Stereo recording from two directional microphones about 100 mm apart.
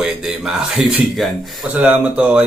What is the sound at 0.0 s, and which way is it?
Speech, 5° right (ahead or behind).